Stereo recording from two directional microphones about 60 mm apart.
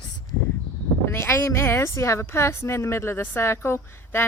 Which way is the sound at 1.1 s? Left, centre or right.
Left.